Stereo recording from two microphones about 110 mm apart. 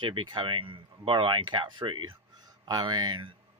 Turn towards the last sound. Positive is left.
turn(degrees=-50)  # may be behind; listen again after turning